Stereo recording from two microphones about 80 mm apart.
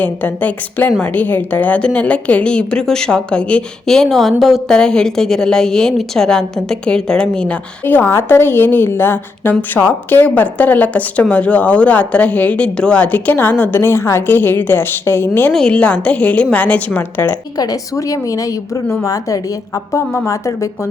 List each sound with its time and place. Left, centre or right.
0.0 s a woman's voice: left
7.9 s a woman's voice: left
13.8 s a woman's voice: left
15.5 s a woman's voice: centre
17.6 s a woman's voice: left